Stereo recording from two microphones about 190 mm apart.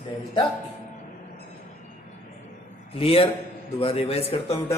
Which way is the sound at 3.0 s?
30° left (ahead or behind).